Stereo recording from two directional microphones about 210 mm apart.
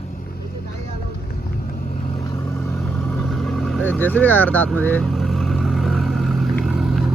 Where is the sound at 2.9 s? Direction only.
10° left (ahead or behind).